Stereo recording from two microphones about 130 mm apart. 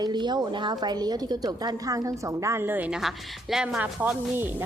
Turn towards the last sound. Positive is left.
turn(degrees=-15)  # may be behind; listen again after turning